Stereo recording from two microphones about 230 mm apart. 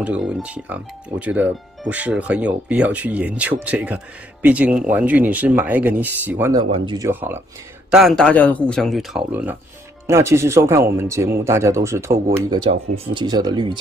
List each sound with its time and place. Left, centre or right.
0.0 s speech: centre